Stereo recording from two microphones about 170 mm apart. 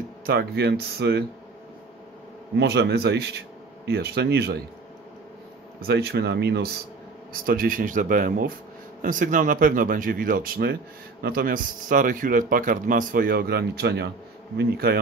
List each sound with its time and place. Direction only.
0.3 s speech: 70° right (ahead or behind)
2.5 s speech: 70° right (ahead or behind)
5.8 s speech: 70° right (ahead or behind)
7.4 s speech: 55° right (ahead or behind)